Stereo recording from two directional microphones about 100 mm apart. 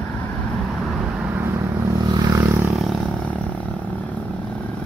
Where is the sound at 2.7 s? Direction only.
Centre (ahead or behind).